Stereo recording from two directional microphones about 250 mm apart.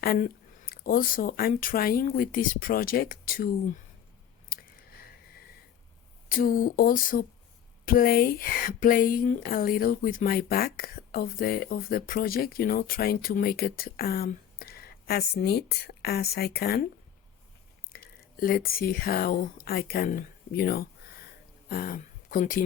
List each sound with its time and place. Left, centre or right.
0.0 s speech: left
4.4 s chewing: left
6.2 s speech: left
17.9 s a woman's voice: left